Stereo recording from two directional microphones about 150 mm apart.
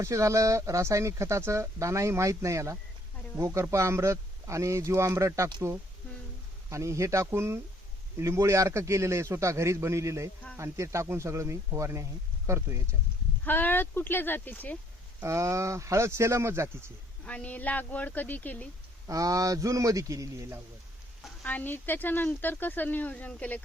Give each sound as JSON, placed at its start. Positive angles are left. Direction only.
{"t": 0.0, "sound": "speech", "side_deg": -20}
{"t": 13.4, "sound": "speech", "side_deg": 10}
{"t": 15.2, "sound": "speech", "side_deg": -20}
{"t": 17.2, "sound": "speech", "side_deg": 10}
{"t": 19.0, "sound": "speech", "side_deg": -20}
{"t": 21.4, "sound": "speech", "side_deg": 10}